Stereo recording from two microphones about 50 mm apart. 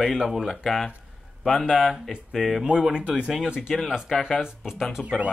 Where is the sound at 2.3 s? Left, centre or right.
Centre.